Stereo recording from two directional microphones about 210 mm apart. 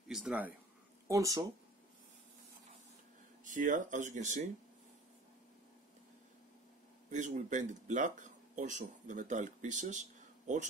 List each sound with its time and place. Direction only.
0.1 s speech: 5° right (ahead or behind)
3.4 s speech: 35° right (ahead or behind)
7.1 s speech: 35° right (ahead or behind)